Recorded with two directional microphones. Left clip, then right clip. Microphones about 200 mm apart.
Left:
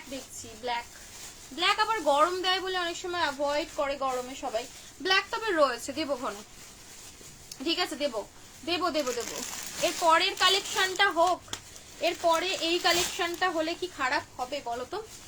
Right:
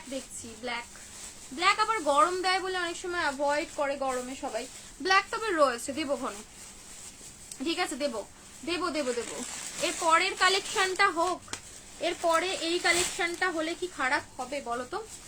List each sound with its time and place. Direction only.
1.5 s speech: 20° right (ahead or behind)
7.6 s speech: 15° right (ahead or behind)